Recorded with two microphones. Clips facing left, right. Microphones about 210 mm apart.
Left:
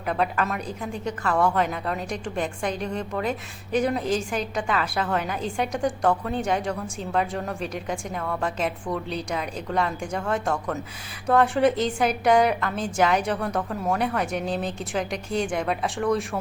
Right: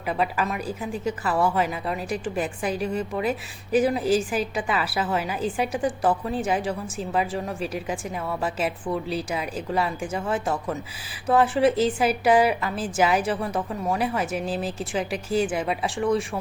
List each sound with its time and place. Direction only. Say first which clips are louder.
0.1 s a woman's voice: even; 5° right (ahead or behind)